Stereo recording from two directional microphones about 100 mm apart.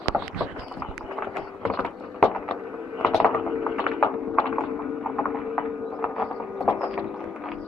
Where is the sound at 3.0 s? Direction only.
5° left (ahead or behind).